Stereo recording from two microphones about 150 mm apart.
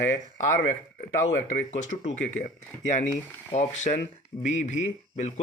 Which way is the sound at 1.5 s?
50° left (ahead or behind).